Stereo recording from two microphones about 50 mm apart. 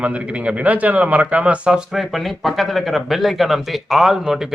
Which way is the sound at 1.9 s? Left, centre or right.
Centre.